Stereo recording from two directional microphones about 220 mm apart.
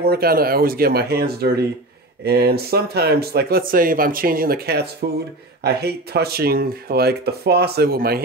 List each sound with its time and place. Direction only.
0.1 s speech: 45° right (ahead or behind)